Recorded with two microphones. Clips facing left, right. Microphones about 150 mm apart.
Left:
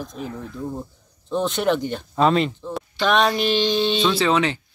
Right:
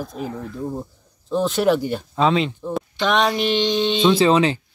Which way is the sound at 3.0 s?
20° right (ahead or behind).